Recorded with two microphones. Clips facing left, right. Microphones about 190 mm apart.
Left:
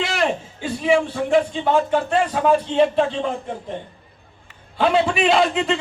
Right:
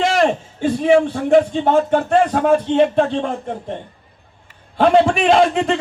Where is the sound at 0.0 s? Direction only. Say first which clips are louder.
Right 6 dB; 45° right (ahead or behind).